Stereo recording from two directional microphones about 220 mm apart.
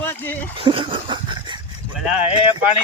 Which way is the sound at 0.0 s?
10° left (ahead or behind).